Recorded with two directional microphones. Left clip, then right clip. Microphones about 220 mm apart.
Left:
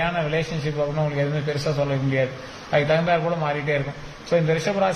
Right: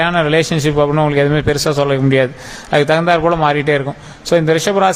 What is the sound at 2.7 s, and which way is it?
A man's voice, 50° right (ahead or behind).